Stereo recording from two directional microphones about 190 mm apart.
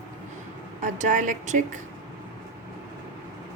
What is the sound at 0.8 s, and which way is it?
A woman's voice, 40° right (ahead or behind).